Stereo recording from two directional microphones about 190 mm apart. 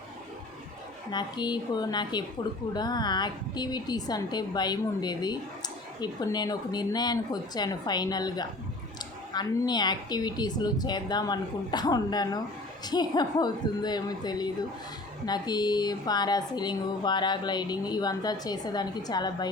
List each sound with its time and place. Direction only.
1.1 s a woman's voice: 25° left (ahead or behind)